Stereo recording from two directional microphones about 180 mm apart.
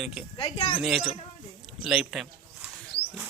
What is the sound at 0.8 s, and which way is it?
Speech, centre (ahead or behind).